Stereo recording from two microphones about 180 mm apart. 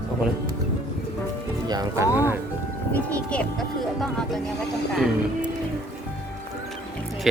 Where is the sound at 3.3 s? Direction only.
Centre (ahead or behind).